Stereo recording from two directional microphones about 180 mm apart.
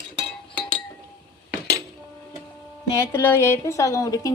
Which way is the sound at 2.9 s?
15° left (ahead or behind).